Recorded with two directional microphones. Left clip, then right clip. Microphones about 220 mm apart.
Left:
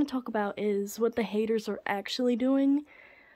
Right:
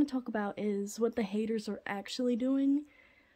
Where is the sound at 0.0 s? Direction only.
10° left (ahead or behind).